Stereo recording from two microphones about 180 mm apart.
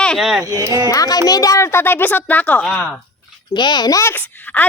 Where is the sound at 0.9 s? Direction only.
20° left (ahead or behind).